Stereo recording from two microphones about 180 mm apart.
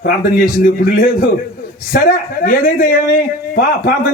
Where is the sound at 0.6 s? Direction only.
55° left (ahead or behind).